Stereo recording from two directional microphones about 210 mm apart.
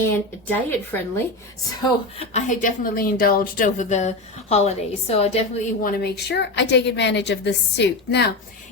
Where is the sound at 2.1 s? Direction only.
35° left (ahead or behind).